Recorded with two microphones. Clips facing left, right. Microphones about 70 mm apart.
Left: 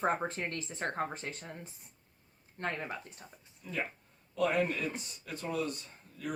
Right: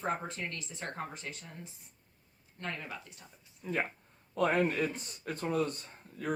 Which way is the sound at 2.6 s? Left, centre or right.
Left.